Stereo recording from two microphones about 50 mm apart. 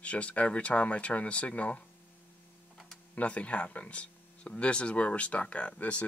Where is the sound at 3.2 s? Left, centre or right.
Left.